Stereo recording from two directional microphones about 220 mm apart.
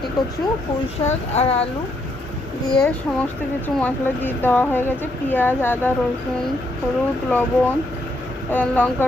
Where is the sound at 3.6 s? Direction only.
10° left (ahead or behind).